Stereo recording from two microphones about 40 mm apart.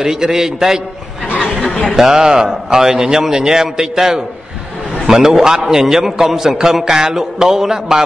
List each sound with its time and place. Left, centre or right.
0.0 s a man's voice: centre
1.7 s a sound: centre
2.0 s a man's voice: centre